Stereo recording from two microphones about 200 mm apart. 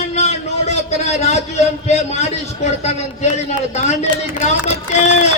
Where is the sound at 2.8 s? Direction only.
35° left (ahead or behind).